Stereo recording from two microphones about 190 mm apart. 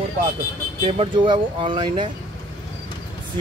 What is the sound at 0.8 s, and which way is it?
Speech, 25° right (ahead or behind).